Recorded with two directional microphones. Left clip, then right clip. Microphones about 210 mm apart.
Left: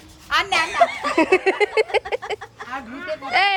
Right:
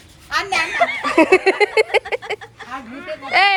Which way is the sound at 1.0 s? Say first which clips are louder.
Right 4 dB; 5° left (ahead or behind).